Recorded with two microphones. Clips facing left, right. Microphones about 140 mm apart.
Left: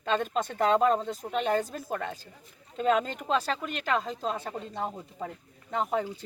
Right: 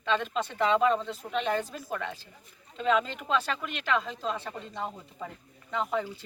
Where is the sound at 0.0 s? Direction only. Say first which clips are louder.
Left 1 dB; 45° left (ahead or behind).